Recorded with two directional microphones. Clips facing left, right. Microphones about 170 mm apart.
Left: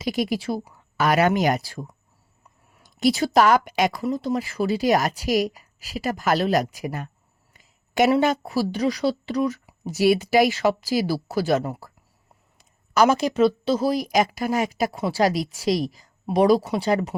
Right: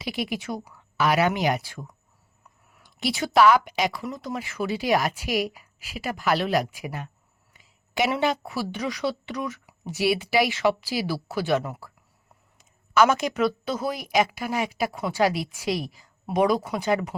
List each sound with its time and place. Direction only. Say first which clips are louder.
0.0 s speech: left 5 dB; 40° left (ahead or behind)
0.9 s speech: left 3 dB; 45° left (ahead or behind)
4.0 s speech: left 7 dB; 30° left (ahead or behind)
7.6 s a sound: left 6 dB; 50° left (ahead or behind)
8.2 s speech: left 4 dB; 40° left (ahead or behind)
14.9 s speech: left 3 dB; 25° left (ahead or behind)
15.2 s speech: left 2 dB; 40° left (ahead or behind)